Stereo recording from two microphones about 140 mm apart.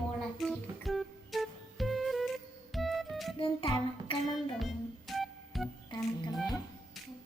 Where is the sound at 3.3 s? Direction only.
40° left (ahead or behind).